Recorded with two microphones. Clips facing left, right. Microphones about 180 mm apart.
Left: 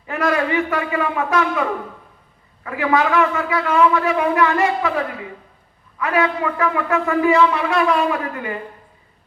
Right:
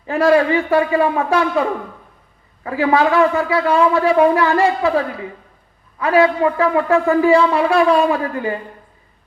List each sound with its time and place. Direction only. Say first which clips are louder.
0.0 s a man's voice: right 6 dB; 30° right (ahead or behind)
2.6 s a man's voice: right 3 dB; 30° right (ahead or behind)